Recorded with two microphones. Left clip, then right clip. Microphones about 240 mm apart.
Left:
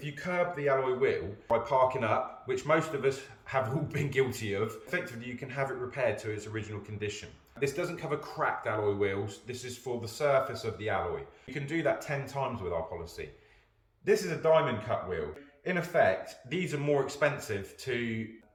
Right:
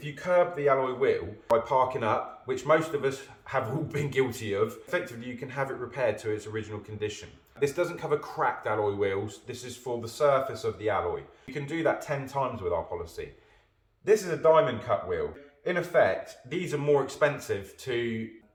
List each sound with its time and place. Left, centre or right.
0.0 s speech: centre
14.0 s speech: centre